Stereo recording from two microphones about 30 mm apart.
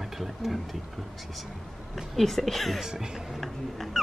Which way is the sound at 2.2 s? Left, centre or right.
Centre.